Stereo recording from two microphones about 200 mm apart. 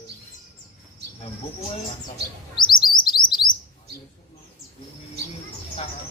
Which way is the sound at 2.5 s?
20° left (ahead or behind).